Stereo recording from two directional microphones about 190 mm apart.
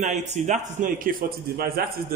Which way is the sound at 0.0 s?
40° right (ahead or behind).